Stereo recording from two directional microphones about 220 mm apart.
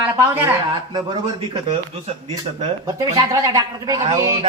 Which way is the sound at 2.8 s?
15° right (ahead or behind).